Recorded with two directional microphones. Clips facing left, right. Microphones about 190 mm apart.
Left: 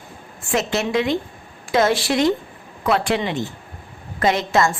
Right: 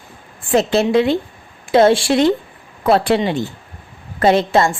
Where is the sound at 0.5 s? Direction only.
30° right (ahead or behind).